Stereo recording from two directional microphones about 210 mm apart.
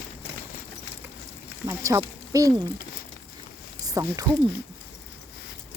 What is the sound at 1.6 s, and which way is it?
Speech, 15° right (ahead or behind).